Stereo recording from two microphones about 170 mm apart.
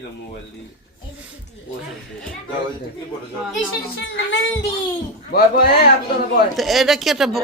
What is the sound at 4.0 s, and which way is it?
Speech, 90° left.